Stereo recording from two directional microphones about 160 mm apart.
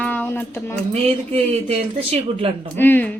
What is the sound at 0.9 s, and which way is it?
Speech, 40° right (ahead or behind).